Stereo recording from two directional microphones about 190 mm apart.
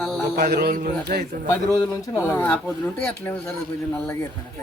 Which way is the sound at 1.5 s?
15° left (ahead or behind).